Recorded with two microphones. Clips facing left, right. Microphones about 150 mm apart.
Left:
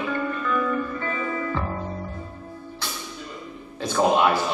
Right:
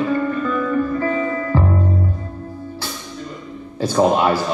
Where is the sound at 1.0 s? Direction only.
35° right (ahead or behind).